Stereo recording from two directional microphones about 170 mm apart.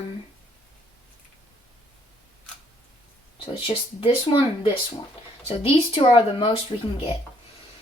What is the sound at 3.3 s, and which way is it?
Speech, 30° left (ahead or behind).